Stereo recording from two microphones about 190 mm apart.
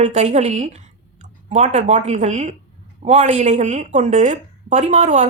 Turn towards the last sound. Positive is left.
turn(degrees=-40)  # may be behind; listen again after turning